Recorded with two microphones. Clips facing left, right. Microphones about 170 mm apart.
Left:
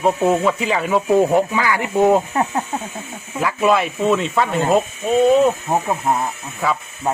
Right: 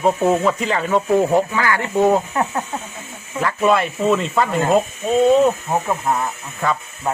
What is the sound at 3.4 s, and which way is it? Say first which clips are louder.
Speech: even; centre (ahead or behind).